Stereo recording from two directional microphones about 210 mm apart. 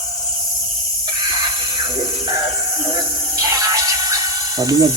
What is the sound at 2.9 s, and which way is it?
Music, 15° right (ahead or behind).